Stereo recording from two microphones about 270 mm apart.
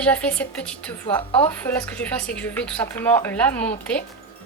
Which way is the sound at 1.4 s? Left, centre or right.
Centre.